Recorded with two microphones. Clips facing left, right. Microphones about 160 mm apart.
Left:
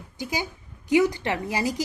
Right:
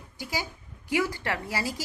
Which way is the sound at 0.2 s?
20° left (ahead or behind).